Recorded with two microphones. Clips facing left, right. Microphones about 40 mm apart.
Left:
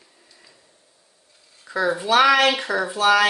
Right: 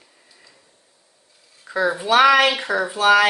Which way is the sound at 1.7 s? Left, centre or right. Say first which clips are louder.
Right 1 dB; right.